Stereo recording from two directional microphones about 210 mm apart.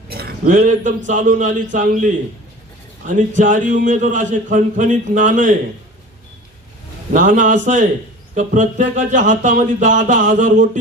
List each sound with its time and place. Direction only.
0.1 s speech: 45° right (ahead or behind)
3.1 s speech: 35° right (ahead or behind)
7.1 s speech: 35° right (ahead or behind)